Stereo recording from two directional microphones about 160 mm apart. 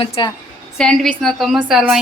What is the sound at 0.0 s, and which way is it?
Speech, 35° left (ahead or behind).